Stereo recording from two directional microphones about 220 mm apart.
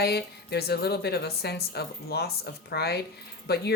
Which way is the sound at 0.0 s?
45° left (ahead or behind).